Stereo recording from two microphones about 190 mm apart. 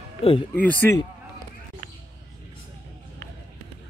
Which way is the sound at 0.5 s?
10° left (ahead or behind).